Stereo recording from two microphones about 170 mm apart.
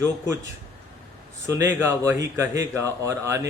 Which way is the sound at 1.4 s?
20° right (ahead or behind).